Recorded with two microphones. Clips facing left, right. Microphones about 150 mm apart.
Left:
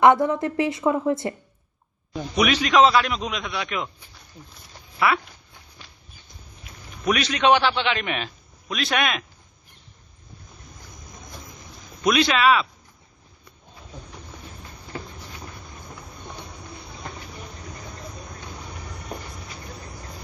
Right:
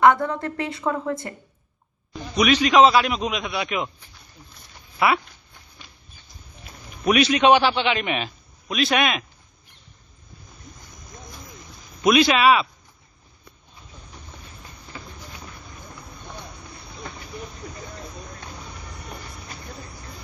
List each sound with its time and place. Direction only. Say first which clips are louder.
0.0 s a woman's voice: left 1 dB; 20° left (ahead or behind)
2.5 s a man's voice: right 3 dB; centre (ahead or behind)
4.9 s speech: right 1 dB; 15° right (ahead or behind)
7.0 s a man's voice: right 4 dB; 10° right (ahead or behind)
12.0 s speech: right 2 dB; 10° right (ahead or behind)